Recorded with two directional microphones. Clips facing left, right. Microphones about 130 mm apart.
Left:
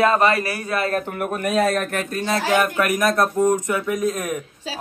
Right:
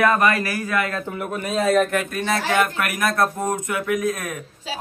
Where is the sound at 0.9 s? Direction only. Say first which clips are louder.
Left 3 dB; 55° left (ahead or behind).